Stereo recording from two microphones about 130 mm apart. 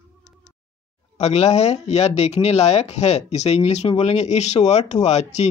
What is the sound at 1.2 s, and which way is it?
Speech, 55° left (ahead or behind).